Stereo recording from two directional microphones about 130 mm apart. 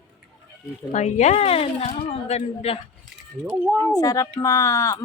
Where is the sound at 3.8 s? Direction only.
25° left (ahead or behind).